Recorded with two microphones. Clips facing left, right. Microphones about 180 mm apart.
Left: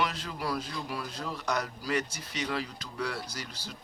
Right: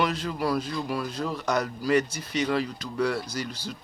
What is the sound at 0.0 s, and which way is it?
Speech, 55° right (ahead or behind).